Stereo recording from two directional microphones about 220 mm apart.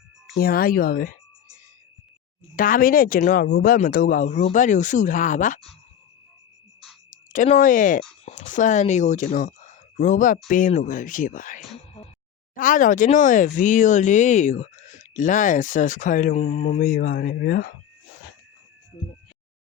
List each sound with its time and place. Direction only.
0.3 s speech: 45° left (ahead or behind)
2.6 s speech: 40° left (ahead or behind)
7.3 s speech: 35° left (ahead or behind)